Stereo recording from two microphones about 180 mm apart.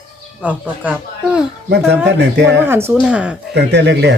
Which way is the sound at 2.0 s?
70° right (ahead or behind).